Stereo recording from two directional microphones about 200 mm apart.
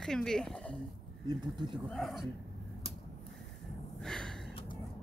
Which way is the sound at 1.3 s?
25° right (ahead or behind).